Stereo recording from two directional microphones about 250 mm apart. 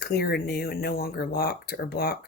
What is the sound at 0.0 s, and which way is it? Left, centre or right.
Speech, left.